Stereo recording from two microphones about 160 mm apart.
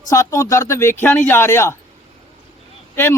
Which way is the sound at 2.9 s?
15° left (ahead or behind).